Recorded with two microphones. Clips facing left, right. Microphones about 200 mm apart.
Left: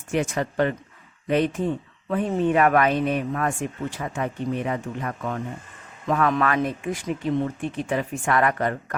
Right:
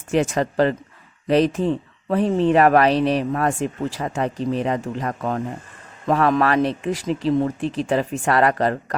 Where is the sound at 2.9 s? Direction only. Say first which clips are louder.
Right 4 dB; 90° right.